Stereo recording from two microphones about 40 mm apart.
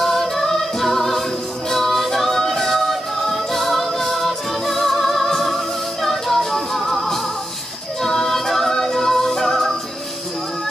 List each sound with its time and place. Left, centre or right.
0.0 s a capella: centre
1.7 s music: centre